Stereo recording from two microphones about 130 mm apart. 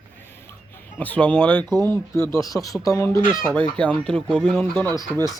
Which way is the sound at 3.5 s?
10° left (ahead or behind).